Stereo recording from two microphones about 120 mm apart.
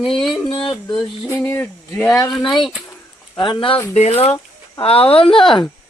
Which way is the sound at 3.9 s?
65° left (ahead or behind).